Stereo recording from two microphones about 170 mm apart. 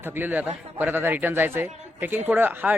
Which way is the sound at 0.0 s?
10° right (ahead or behind).